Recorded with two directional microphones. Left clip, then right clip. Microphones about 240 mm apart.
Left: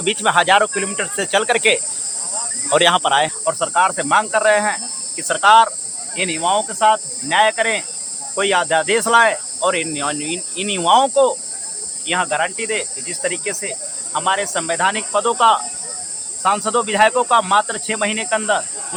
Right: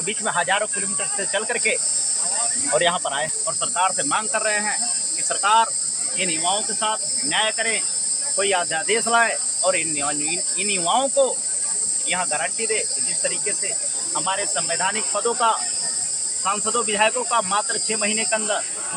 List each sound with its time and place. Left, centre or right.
0.0 s cricket: left